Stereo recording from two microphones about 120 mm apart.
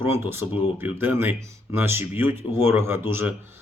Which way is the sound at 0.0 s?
20° right (ahead or behind).